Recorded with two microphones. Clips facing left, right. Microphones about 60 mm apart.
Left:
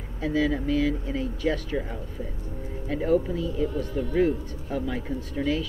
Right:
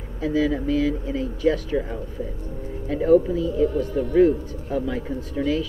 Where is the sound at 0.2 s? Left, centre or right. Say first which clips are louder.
Right 3 dB; centre.